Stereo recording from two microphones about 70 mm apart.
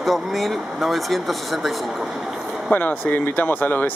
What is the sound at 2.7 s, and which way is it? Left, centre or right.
Speech, left.